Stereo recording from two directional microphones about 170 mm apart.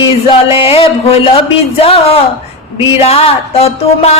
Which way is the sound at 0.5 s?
35° left (ahead or behind).